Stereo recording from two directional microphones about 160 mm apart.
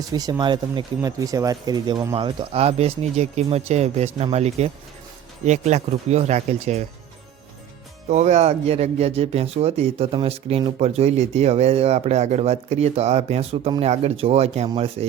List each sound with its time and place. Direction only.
0.1 s speech: 25° right (ahead or behind); by 6.8 s 45° right (ahead or behind)
8.1 s speech: 45° right (ahead or behind)